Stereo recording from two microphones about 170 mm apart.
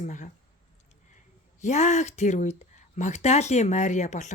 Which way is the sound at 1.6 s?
45° left (ahead or behind).